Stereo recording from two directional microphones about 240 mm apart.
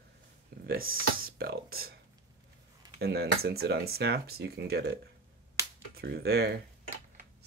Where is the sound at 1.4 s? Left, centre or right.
Right.